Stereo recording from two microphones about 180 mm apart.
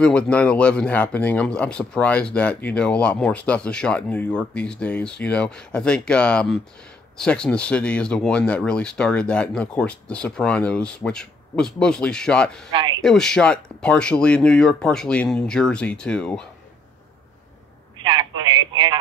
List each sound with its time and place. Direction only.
0.0 s speech: 5° left (ahead or behind)
18.0 s speech: 25° right (ahead or behind)